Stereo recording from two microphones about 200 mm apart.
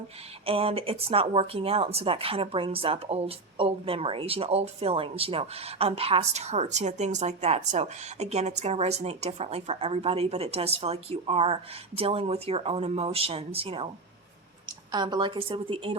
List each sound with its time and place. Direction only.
0.4 s speech: 30° right (ahead or behind)
14.9 s speech: 20° right (ahead or behind)